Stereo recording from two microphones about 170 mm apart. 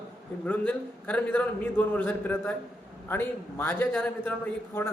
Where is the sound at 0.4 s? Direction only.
10° left (ahead or behind).